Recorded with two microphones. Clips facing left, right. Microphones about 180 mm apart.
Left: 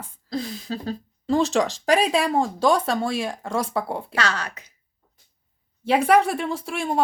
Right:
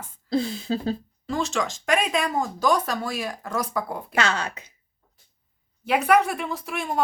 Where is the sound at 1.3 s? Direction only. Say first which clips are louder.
Left 6 dB; 35° left (ahead or behind).